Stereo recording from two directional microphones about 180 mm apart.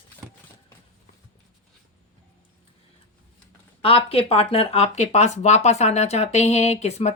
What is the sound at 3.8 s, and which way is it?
Speech, 30° left (ahead or behind).